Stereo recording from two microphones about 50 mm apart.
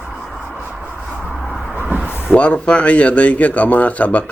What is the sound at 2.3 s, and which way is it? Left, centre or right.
Speech, left.